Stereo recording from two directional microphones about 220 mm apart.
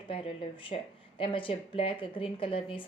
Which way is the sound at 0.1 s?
25° left (ahead or behind).